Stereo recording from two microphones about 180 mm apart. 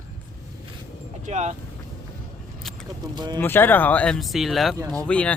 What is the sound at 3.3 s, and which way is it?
Speech, 10° left (ahead or behind).